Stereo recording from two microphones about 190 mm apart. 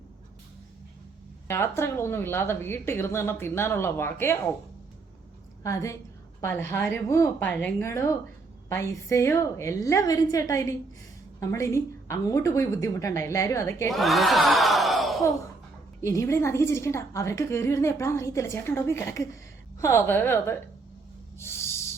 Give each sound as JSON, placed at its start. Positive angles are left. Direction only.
{"t": 1.5, "sound": "a woman's voice", "side_deg": 15}
{"t": 5.6, "sound": "a woman's voice", "side_deg": 15}
{"t": 13.9, "sound": "speech", "side_deg": 0}
{"t": 16.0, "sound": "a woman's voice", "side_deg": 15}
{"t": 21.3, "sound": "a sound", "side_deg": 15}